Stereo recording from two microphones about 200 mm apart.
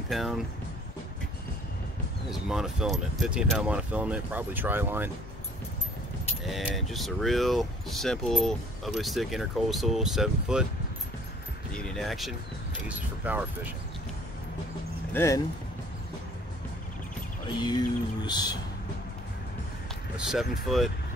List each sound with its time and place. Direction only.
0.1 s speech: centre (ahead or behind)
2.4 s speech: centre (ahead or behind)
6.4 s speech: centre (ahead or behind)
11.7 s speech: centre (ahead or behind)
15.1 s speech: 15° left (ahead or behind)
17.6 s a sound: 20° left (ahead or behind)
20.6 s speech: centre (ahead or behind)